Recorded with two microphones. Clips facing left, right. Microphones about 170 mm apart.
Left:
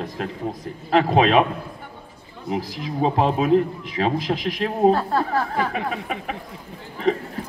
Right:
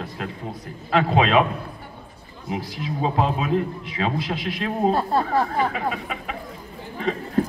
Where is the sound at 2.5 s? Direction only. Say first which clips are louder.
Left 3 dB; 40° left (ahead or behind).